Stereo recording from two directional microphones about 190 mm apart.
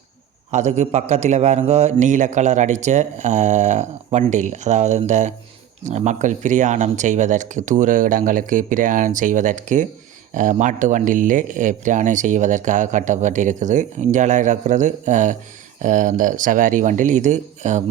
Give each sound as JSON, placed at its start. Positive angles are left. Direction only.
{"t": 0.5, "sound": "speech", "side_deg": -35}